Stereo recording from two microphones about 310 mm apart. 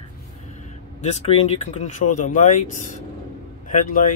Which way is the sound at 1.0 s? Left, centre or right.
Left.